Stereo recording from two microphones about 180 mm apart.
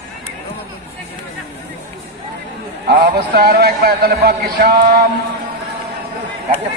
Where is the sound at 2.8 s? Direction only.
60° right (ahead or behind).